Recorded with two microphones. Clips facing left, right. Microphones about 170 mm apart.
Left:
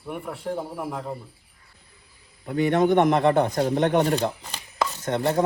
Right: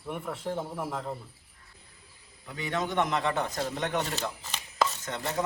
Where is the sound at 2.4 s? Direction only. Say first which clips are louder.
Left 12 dB; 55° left (ahead or behind).